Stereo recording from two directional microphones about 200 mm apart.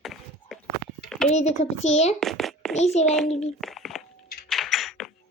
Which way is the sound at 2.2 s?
Centre (ahead or behind).